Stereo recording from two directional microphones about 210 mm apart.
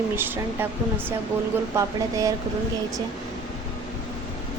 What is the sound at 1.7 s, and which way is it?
Speech, 15° right (ahead or behind).